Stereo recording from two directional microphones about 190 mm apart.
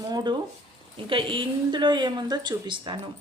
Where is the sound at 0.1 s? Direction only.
20° right (ahead or behind).